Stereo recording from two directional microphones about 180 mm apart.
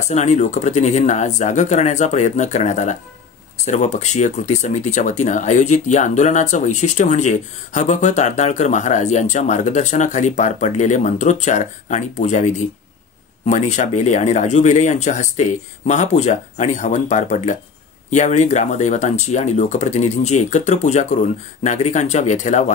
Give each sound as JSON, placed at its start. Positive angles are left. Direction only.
{"t": 0.1, "sound": "speech", "side_deg": 40}